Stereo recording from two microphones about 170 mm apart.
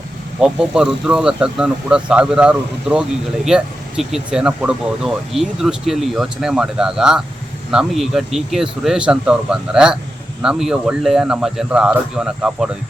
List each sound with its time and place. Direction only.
0.3 s speech: 5° right (ahead or behind)